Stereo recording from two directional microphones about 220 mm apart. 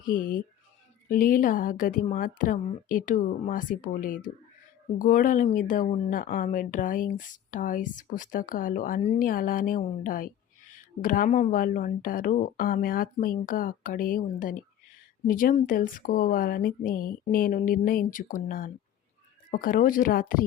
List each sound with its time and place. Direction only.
0.0 s a woman's voice: 40° left (ahead or behind)